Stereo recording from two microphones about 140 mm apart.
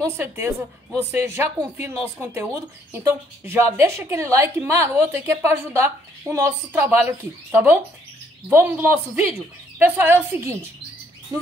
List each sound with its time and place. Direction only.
0.0 s a woman's voice: 20° right (ahead or behind)